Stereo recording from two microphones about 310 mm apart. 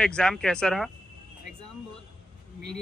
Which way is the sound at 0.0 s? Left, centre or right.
Centre.